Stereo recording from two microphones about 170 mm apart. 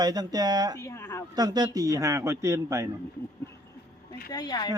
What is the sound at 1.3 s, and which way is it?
Speech, 25° right (ahead or behind).